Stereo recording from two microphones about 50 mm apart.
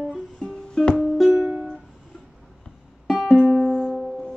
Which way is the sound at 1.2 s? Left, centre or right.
Right.